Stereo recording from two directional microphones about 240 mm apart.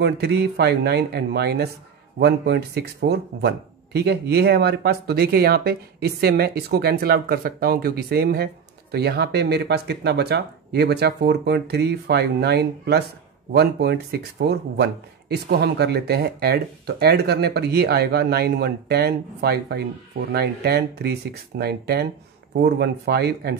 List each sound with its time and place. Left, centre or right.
0.0 s speech: right